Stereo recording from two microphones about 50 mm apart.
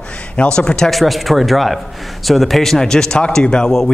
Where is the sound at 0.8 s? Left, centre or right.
Centre.